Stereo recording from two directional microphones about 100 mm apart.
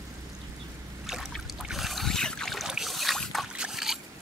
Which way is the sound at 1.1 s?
5° right (ahead or behind).